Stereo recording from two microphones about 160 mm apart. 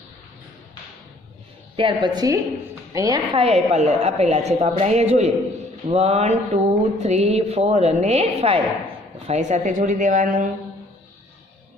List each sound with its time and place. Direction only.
1.8 s mantra: 30° right (ahead or behind)
2.9 s a woman's voice: 20° right (ahead or behind); by 5.3 s 45° right (ahead or behind)
5.9 s mantra: 40° right (ahead or behind)
9.2 s a woman's voice: 45° right (ahead or behind)